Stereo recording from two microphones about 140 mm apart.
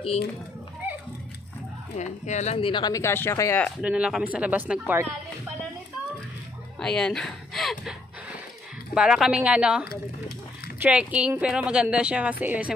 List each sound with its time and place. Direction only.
2.0 s speech: 55° left (ahead or behind); by 3.6 s 20° left (ahead or behind)
3.8 s a woman's voice: 10° right (ahead or behind)
6.8 s a sound: 5° left (ahead or behind)
8.9 s a woman's voice: 5° right (ahead or behind)